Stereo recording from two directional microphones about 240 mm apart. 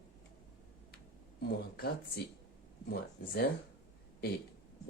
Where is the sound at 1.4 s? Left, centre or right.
Left.